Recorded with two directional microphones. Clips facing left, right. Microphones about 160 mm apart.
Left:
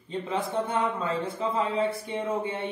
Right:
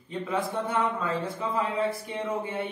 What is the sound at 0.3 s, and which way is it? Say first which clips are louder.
Speech: even; 25° left (ahead or behind).